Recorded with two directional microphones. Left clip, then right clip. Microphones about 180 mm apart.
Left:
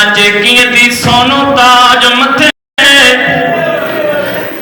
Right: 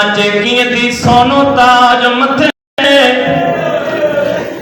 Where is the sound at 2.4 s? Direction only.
50° right (ahead or behind).